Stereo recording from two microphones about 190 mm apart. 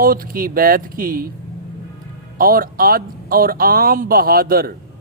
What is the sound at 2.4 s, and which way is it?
Speech, 50° right (ahead or behind).